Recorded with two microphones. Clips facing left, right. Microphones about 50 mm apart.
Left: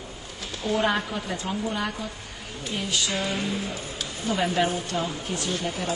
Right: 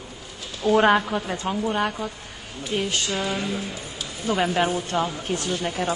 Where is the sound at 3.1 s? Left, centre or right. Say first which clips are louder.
Right 2 dB; right.